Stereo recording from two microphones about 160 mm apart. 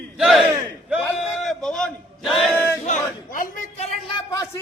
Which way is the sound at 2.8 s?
55° left (ahead or behind).